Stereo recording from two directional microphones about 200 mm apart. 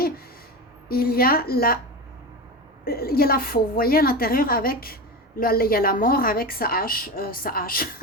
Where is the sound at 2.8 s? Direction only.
50° left (ahead or behind).